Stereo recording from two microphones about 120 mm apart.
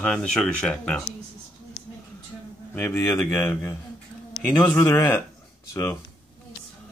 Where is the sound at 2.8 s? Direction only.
15° left (ahead or behind).